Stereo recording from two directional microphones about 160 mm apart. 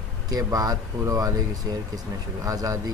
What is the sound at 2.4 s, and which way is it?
Speech, 20° right (ahead or behind).